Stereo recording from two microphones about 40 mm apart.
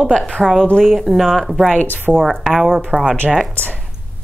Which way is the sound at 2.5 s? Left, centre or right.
Right.